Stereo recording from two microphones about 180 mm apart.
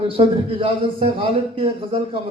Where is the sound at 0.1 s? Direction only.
30° right (ahead or behind).